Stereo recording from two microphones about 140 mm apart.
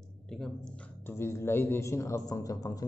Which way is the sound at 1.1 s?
20° left (ahead or behind).